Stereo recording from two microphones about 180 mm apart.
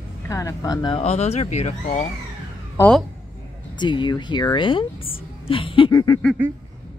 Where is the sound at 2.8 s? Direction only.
5° left (ahead or behind).